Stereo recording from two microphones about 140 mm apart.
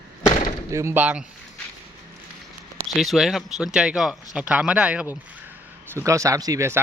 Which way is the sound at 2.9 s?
Centre (ahead or behind).